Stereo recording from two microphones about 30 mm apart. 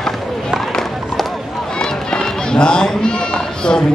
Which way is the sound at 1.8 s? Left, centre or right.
Left.